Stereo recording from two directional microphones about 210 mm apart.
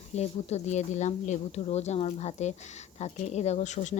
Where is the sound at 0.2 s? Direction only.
30° left (ahead or behind).